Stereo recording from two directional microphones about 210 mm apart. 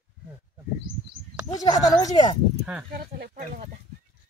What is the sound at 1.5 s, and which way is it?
Speech, 20° left (ahead or behind).